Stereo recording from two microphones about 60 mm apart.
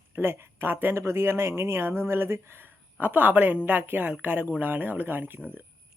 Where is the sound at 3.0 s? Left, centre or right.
Right.